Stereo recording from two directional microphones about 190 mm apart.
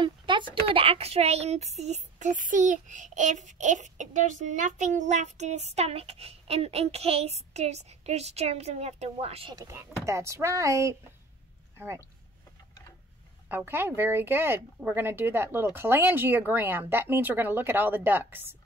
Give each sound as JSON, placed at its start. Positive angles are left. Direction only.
{"t": 0.0, "sound": "speech", "side_deg": -25}
{"t": 13.5, "sound": "speech", "side_deg": -10}